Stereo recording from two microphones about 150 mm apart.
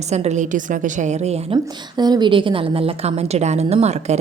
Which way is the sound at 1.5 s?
30° right (ahead or behind).